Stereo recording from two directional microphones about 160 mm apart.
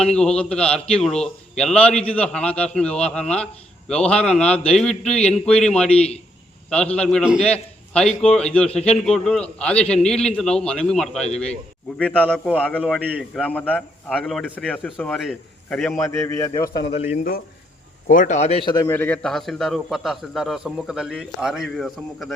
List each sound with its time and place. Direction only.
0.0 s a man's voice: 5° left (ahead or behind)
16.2 s a man's voice: 15° left (ahead or behind)
17.2 s a man's voice: 65° left (ahead or behind)
18.1 s speech: 50° left (ahead or behind)
18.6 s a man's voice: 25° left (ahead or behind)
18.9 s a man's voice: 10° left (ahead or behind)